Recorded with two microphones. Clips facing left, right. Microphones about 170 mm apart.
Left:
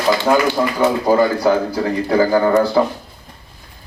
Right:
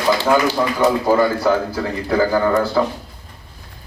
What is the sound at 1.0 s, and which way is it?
Speech, 15° left (ahead or behind).